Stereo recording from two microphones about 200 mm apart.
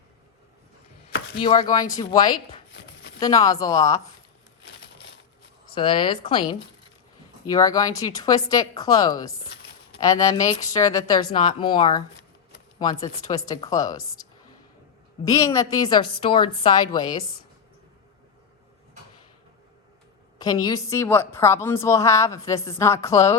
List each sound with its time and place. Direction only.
1.5 s a woman's voice: 20° left (ahead or behind)
5.7 s a woman's voice: 25° left (ahead or behind)
9.5 s a sound: 55° left (ahead or behind)
10.0 s a woman's voice: 15° left (ahead or behind)
20.4 s a woman's voice: 20° left (ahead or behind)